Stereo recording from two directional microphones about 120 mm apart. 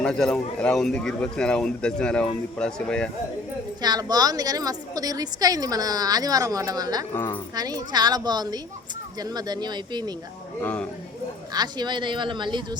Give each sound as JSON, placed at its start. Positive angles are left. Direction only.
{"t": 0.0, "sound": "speech", "side_deg": 5}
{"t": 3.8, "sound": "a woman's voice", "side_deg": -35}
{"t": 7.1, "sound": "speech", "side_deg": 15}
{"t": 7.5, "sound": "a woman's voice", "side_deg": -30}
{"t": 10.6, "sound": "speech", "side_deg": 15}
{"t": 11.5, "sound": "a woman's voice", "side_deg": -35}